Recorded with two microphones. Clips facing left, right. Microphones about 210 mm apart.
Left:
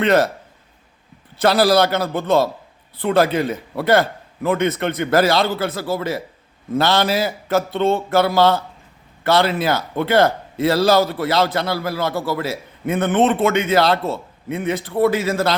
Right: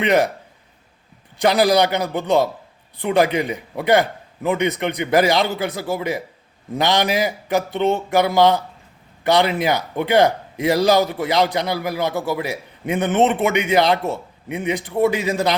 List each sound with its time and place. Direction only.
0.0 s a man's voice: 15° right (ahead or behind)
1.4 s a man's voice: 15° right (ahead or behind)